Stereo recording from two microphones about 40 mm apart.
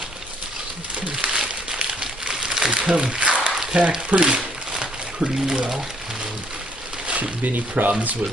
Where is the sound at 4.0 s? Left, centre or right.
Right.